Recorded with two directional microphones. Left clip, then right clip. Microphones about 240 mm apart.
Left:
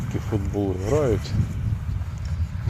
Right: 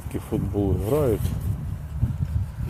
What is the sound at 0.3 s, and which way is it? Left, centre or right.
Speech, centre.